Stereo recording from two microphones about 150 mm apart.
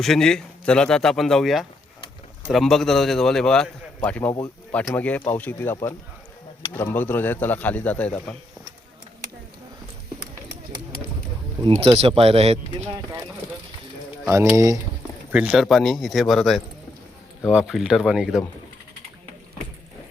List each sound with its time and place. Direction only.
0.0 s a man's voice: 5° left (ahead or behind)
6.7 s speech: 10° left (ahead or behind)
11.8 s speech: 40° right (ahead or behind)
14.3 s speech: 20° right (ahead or behind)
15.3 s a man's voice: 5° right (ahead or behind)